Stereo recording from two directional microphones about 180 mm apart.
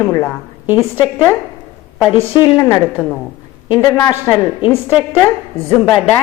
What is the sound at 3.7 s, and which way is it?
A woman's voice, 20° left (ahead or behind).